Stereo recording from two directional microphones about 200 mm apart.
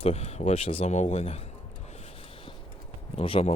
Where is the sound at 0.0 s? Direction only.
30° left (ahead or behind).